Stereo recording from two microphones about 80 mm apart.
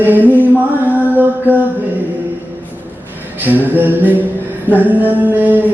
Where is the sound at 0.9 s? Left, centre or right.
Right.